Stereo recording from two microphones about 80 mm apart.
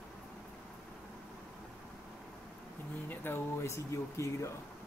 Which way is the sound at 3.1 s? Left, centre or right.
Left.